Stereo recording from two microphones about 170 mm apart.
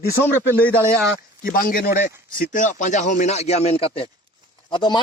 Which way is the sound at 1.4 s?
55° left (ahead or behind).